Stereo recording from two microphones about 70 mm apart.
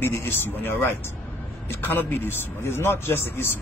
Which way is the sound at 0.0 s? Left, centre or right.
Left.